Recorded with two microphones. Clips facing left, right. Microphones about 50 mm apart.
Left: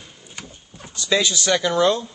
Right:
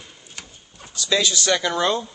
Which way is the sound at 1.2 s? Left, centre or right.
Left.